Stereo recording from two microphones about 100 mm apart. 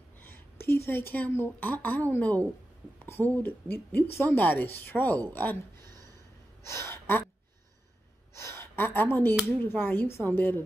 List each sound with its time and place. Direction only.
0.2 s speech: 20° left (ahead or behind)
6.6 s gasp: 30° left (ahead or behind)
8.4 s a sound: 25° left (ahead or behind)
9.7 s speech: 20° left (ahead or behind)